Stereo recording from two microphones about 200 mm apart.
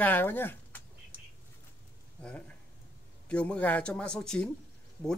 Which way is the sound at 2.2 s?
5° left (ahead or behind).